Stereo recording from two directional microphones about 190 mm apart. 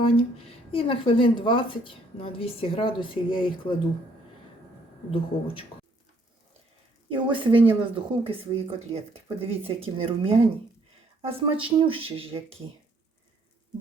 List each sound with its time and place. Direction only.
0.0 s speech: 30° left (ahead or behind)
5.1 s speech: 30° left (ahead or behind)
7.1 s speech: 25° right (ahead or behind)